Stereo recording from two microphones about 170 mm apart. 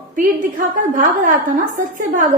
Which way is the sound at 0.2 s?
50° right (ahead or behind).